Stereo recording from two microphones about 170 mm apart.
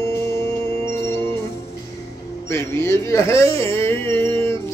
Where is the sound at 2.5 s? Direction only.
15° left (ahead or behind).